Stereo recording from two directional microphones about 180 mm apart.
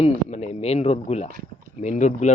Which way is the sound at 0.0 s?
35° left (ahead or behind).